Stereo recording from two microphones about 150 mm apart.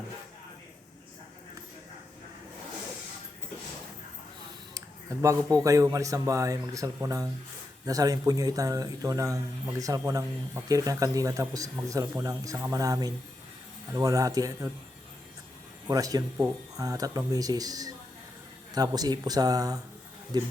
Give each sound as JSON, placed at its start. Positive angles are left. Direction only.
{"t": 4.7, "sound": "speech", "side_deg": -20}
{"t": 15.9, "sound": "speech", "side_deg": -25}